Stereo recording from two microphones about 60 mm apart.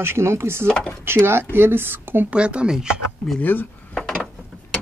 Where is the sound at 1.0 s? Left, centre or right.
Right.